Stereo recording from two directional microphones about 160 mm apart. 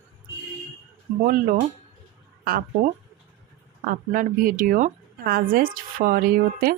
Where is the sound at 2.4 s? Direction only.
65° right (ahead or behind).